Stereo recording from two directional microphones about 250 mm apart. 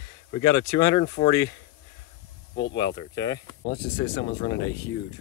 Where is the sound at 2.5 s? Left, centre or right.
Left.